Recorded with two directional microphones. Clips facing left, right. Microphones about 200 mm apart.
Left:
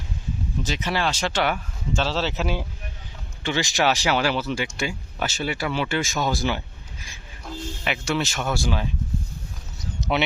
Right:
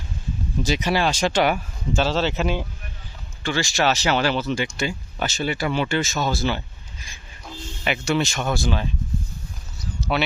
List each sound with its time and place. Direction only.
0.6 s speech: 10° right (ahead or behind)
2.0 s speech: centre (ahead or behind)
3.4 s speech: 20° left (ahead or behind)
7.1 s speech: centre (ahead or behind)
9.7 s a sound: 20° left (ahead or behind)